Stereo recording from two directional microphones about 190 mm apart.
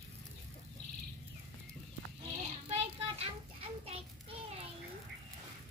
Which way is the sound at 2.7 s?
30° right (ahead or behind).